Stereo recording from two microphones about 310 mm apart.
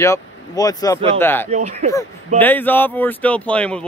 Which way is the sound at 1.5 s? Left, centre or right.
Right.